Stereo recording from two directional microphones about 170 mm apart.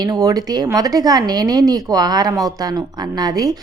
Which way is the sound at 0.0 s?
20° right (ahead or behind).